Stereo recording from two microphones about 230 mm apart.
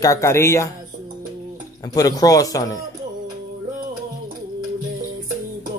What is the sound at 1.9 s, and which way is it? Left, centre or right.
Speech, centre.